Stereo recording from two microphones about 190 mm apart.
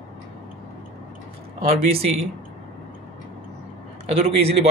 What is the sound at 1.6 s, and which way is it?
Speech, 30° right (ahead or behind).